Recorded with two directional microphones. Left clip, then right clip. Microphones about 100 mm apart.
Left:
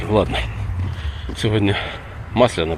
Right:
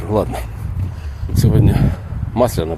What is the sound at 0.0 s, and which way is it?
Speech, 35° right (ahead or behind).